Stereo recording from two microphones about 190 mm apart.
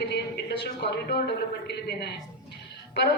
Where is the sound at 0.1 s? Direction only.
60° left (ahead or behind).